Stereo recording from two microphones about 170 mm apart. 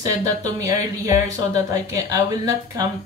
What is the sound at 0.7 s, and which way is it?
Speech, 20° right (ahead or behind).